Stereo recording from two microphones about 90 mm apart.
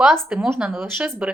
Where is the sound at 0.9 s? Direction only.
15° right (ahead or behind).